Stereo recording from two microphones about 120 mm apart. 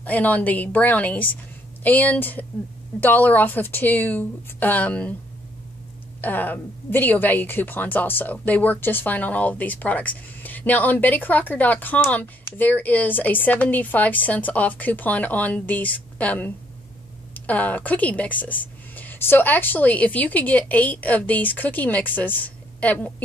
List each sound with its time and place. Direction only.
0.0 s a woman's voice: 15° left (ahead or behind)
6.2 s a woman's voice: 15° left (ahead or behind)